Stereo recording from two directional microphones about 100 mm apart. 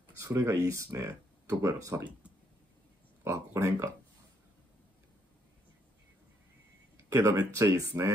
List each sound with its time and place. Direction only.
0.2 s speech: 30° right (ahead or behind)
3.3 s speech: 30° right (ahead or behind)
7.0 s speech: 30° right (ahead or behind)